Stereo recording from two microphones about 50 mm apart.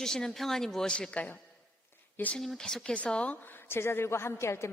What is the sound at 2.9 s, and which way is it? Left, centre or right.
Speech, left.